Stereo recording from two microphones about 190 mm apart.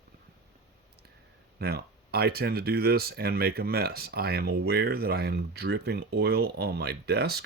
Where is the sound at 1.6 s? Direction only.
55° right (ahead or behind).